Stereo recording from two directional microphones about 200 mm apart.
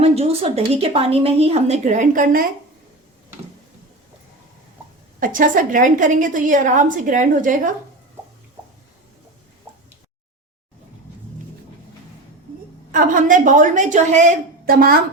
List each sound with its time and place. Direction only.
0.0 s a woman's voice: 30° right (ahead or behind)
5.2 s a woman's voice: 40° right (ahead or behind)
9.7 s drip: 15° right (ahead or behind)
12.9 s a woman's voice: 40° right (ahead or behind)